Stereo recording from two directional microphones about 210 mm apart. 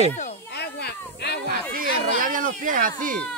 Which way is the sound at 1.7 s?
40° right (ahead or behind).